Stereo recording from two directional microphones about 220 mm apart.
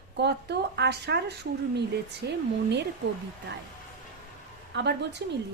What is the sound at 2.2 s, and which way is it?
Speech, 50° right (ahead or behind).